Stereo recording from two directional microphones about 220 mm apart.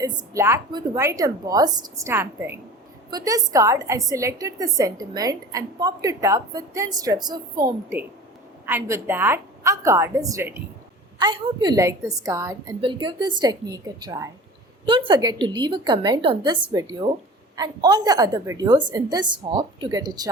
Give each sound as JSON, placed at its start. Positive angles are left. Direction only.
{"t": 0.0, "sound": "a woman's voice", "side_deg": -15}
{"t": 11.2, "sound": "a woman's voice", "side_deg": -20}